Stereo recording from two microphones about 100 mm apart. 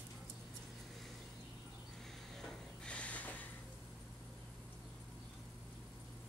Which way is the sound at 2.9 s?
10° left (ahead or behind).